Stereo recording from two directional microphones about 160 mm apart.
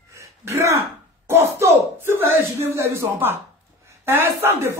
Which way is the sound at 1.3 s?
15° right (ahead or behind).